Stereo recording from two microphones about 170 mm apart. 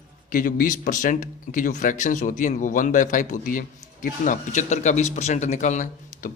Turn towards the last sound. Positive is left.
turn(degrees=45)  # may be behind; listen again after turning